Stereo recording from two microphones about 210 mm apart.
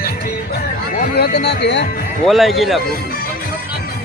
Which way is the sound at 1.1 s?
50° left (ahead or behind).